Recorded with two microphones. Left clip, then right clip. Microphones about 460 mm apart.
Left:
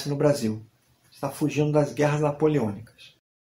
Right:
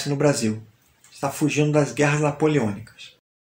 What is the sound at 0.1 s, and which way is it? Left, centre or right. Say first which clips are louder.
Speech: right 2 dB; left.